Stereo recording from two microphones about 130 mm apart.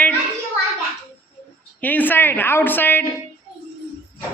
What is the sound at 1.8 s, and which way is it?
A man's voice, 15° left (ahead or behind).